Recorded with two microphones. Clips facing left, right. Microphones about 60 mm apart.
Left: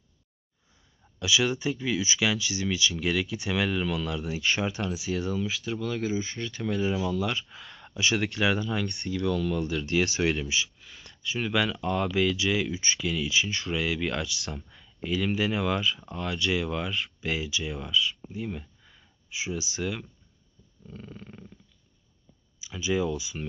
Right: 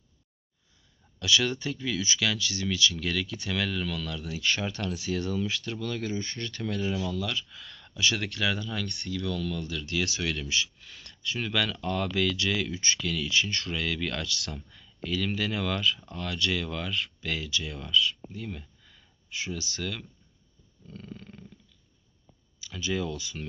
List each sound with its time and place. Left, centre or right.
1.2 s speech: centre
7.2 s speech: left
7.6 s a sound: centre
7.9 s a sound: left
8.1 s speech: centre
8.4 s speech: left
9.2 s speech: centre
9.8 s speech: left
10.4 s speech: centre
10.8 s speech: centre
14.4 s speech: centre
22.6 s speech: centre